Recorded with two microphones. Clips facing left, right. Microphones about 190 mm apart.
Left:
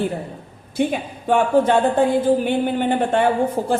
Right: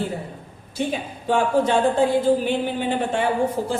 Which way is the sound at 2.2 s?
55° left (ahead or behind).